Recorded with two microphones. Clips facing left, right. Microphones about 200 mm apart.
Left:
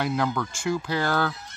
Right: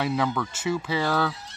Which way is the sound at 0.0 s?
Centre (ahead or behind).